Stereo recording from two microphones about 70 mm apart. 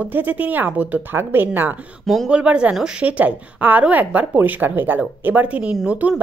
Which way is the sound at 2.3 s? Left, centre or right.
Centre.